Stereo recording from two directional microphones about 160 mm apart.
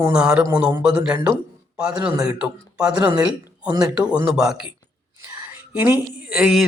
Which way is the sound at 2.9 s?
25° right (ahead or behind).